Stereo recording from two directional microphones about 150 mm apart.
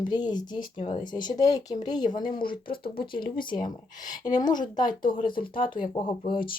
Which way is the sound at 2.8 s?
80° left.